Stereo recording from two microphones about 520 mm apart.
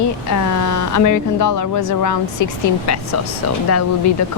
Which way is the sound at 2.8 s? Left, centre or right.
Left.